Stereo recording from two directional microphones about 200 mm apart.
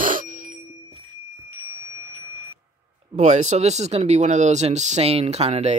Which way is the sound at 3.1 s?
35° right (ahead or behind).